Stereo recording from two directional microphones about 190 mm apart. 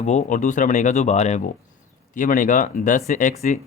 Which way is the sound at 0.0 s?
35° left (ahead or behind).